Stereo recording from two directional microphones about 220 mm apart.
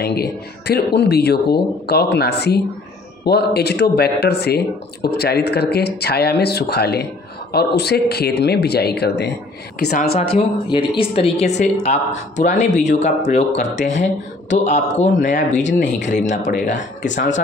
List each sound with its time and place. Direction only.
0.0 s speech: 45° left (ahead or behind)
10.3 s speech: 20° left (ahead or behind)